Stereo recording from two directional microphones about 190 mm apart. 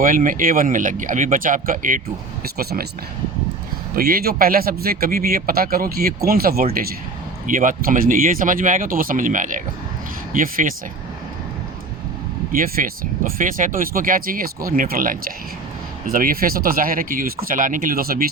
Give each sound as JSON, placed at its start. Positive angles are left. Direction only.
{"t": 0.0, "sound": "speech", "side_deg": -45}
{"t": 3.9, "sound": "speech", "side_deg": -50}
{"t": 12.5, "sound": "speech", "side_deg": -45}